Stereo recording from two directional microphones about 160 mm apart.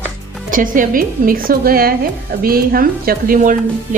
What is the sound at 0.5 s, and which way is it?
A woman's voice, 60° right (ahead or behind).